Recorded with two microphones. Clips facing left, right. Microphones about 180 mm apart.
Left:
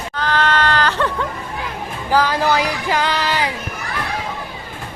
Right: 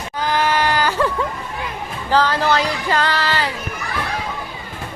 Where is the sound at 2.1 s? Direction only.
10° left (ahead or behind).